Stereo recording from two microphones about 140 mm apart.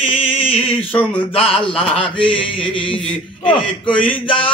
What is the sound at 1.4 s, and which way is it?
Speech, 40° left (ahead or behind).